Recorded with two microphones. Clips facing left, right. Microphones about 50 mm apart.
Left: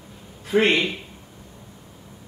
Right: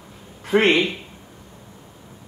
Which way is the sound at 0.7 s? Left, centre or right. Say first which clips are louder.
Right 3 dB; centre.